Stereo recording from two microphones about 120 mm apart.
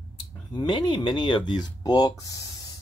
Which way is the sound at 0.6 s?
40° left (ahead or behind).